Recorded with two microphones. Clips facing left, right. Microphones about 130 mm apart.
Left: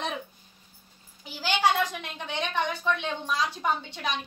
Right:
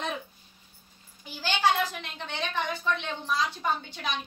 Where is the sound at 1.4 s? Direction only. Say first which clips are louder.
Left 1 dB; 15° left (ahead or behind).